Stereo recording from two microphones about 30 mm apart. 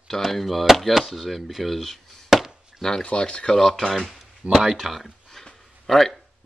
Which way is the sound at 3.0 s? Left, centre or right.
Left.